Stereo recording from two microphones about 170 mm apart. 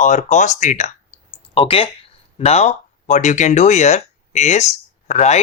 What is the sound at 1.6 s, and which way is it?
Speech, 30° left (ahead or behind).